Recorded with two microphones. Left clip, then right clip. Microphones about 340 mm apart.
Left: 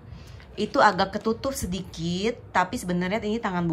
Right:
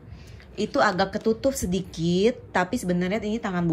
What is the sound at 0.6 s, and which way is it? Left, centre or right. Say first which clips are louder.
A woman's voice: left 2 dB; centre.